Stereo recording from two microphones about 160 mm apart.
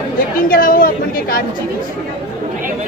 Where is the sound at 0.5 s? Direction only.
60° left (ahead or behind).